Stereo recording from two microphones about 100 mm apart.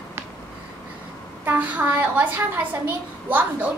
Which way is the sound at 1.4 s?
15° right (ahead or behind).